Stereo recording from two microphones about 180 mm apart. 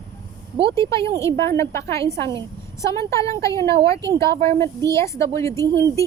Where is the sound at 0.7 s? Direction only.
15° left (ahead or behind).